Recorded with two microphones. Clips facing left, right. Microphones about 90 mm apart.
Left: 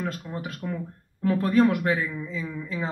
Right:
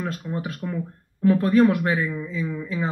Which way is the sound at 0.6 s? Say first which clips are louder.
Even; centre (ahead or behind).